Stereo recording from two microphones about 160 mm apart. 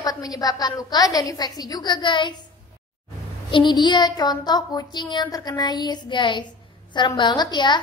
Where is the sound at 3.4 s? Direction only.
30° left (ahead or behind).